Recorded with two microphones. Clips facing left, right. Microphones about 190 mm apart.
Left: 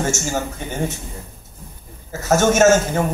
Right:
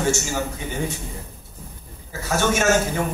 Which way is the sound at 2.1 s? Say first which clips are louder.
Left 6 dB; 45° left (ahead or behind).